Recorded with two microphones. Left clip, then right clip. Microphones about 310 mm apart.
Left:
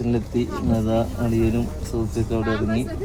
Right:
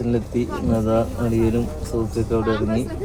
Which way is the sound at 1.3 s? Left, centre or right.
Centre.